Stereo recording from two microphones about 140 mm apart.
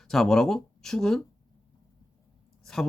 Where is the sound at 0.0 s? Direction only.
Centre (ahead or behind).